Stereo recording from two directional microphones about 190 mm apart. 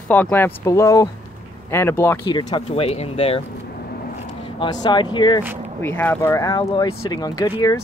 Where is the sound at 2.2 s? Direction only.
25° left (ahead or behind).